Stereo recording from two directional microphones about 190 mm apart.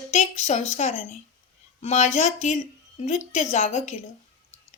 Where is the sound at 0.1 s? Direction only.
35° left (ahead or behind).